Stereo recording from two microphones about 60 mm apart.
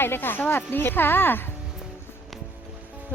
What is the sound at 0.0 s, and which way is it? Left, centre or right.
Speech, left.